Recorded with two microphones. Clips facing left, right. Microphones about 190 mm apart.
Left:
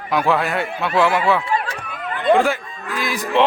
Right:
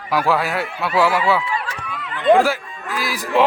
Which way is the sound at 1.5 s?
50° left (ahead or behind).